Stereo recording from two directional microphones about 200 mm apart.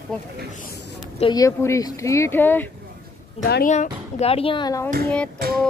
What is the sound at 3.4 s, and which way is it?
Speech, 50° left (ahead or behind).